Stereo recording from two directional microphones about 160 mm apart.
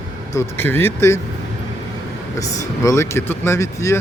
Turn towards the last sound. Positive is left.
turn(degrees=20)  # may be behind; listen again after turning